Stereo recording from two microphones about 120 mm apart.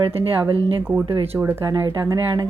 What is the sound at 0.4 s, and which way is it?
Speech, 45° right (ahead or behind).